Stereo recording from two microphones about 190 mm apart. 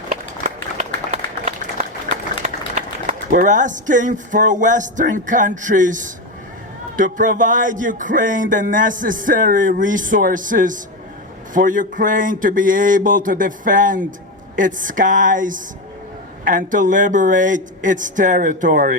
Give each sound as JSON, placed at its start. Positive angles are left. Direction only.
{"t": 0.1, "sound": "a sound", "side_deg": -40}
{"t": 2.4, "sound": "speech", "side_deg": -40}
{"t": 6.9, "sound": "music", "side_deg": -45}